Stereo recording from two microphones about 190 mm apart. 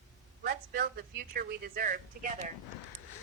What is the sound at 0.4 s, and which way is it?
A woman's voice, 50° right (ahead or behind).